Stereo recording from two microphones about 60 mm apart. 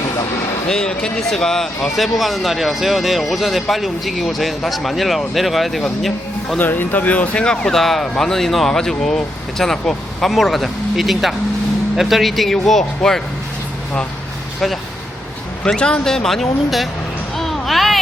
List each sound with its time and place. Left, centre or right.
0.7 s speech: centre
6.6 s speech: left
7.4 s speech: centre
7.8 s speech: centre
15.6 s speech: centre
17.3 s a sound: centre